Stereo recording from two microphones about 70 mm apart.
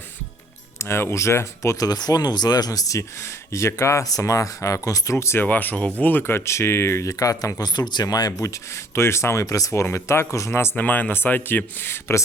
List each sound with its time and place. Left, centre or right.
0.8 s speech: left
4.0 s speech: left
5.1 s speech: left
7.7 s speech: left
8.7 s speech: left
9.8 s speech: left
10.8 s speech: left